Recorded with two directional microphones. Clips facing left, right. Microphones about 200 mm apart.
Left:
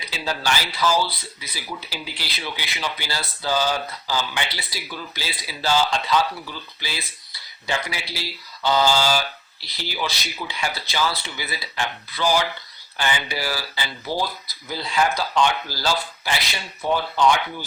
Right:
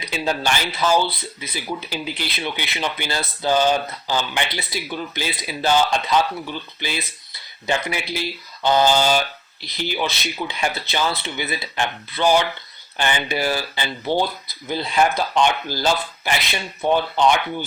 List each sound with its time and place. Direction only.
0.0 s speech: 20° right (ahead or behind)
8.1 s speech: 20° right (ahead or behind)